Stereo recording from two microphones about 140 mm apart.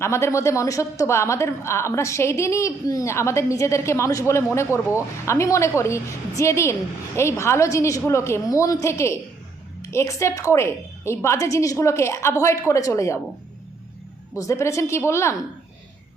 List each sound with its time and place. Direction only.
0.0 s a woman's voice: 20° left (ahead or behind)
14.3 s a woman's voice: 20° left (ahead or behind)